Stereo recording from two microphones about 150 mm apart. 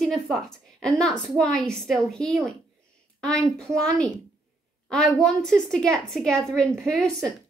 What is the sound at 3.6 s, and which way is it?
A woman's voice, 5° left (ahead or behind).